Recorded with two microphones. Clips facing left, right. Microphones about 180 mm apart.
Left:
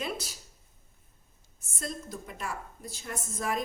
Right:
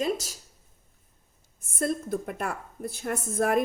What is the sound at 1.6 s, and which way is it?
A woman's voice, 55° right (ahead or behind).